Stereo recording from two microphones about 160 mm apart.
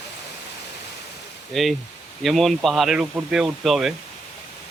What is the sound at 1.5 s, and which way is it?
Speech, centre (ahead or behind).